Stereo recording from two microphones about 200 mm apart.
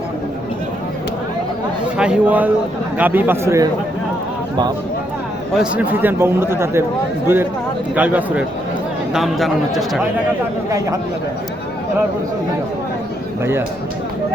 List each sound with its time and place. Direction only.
2.0 s a man's voice: 5° right (ahead or behind)
5.7 s a man's voice: 10° right (ahead or behind)
10.7 s speech: 15° right (ahead or behind)
13.4 s speech: 10° right (ahead or behind)